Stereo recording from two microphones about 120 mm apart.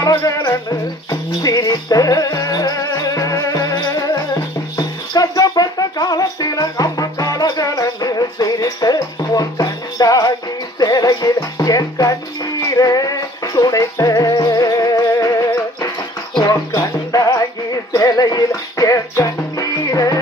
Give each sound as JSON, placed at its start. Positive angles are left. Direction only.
{"t": 0.0, "sound": "music", "side_deg": 25}